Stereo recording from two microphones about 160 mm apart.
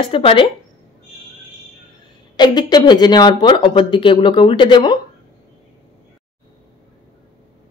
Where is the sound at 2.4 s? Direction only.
25° left (ahead or behind).